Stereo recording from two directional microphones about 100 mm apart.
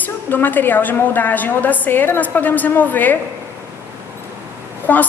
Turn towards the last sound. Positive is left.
turn(degrees=20)  # may be behind; listen again after turning